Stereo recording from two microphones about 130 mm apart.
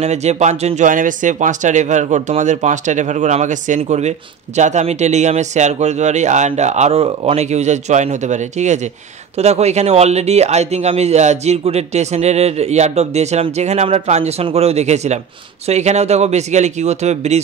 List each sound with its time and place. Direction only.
0.0 s a man's voice: 60° right (ahead or behind)